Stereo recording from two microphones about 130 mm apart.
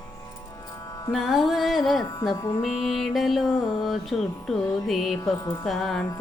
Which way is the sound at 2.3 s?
30° left (ahead or behind).